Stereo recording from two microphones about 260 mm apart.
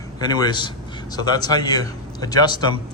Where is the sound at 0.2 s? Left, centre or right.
Centre.